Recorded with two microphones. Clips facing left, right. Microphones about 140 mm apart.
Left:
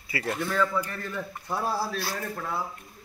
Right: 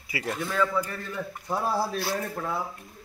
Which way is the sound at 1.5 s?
20° right (ahead or behind).